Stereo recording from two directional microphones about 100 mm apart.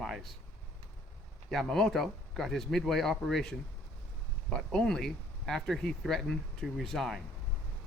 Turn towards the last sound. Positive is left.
turn(degrees=0)  # may be behind; listen again after turning